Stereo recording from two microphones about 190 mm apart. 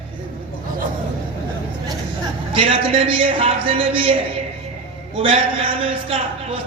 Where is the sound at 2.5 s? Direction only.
30° right (ahead or behind).